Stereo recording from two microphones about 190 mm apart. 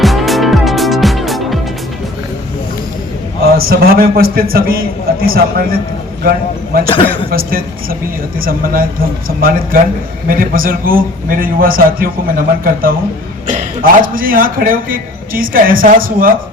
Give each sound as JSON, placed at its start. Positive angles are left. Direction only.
{"t": 0.0, "sound": "music", "side_deg": 0}
{"t": 3.7, "sound": "a man's voice", "side_deg": -50}
{"t": 6.8, "sound": "a man's voice", "side_deg": 30}
{"t": 7.3, "sound": "a man's voice", "side_deg": -50}